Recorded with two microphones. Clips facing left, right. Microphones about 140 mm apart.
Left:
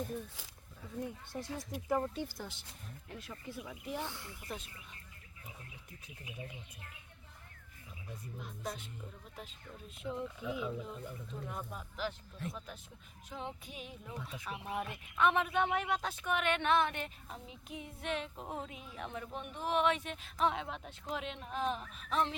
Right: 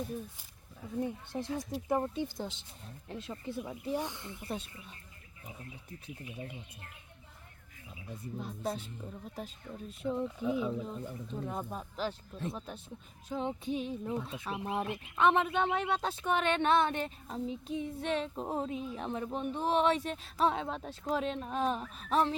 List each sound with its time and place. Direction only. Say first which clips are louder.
0.8 s speech: right 6 dB; 20° right (ahead or behind)
4.0 s speech: right 4 dB; 20° right (ahead or behind)
8.4 s speech: right 7 dB; 30° right (ahead or behind)
10.0 s speech: right 6 dB; 40° right (ahead or behind)